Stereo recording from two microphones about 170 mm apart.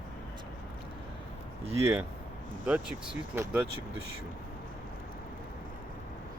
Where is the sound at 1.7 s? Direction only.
15° right (ahead or behind).